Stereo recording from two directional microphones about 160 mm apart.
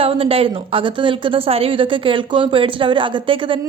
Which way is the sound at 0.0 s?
35° right (ahead or behind).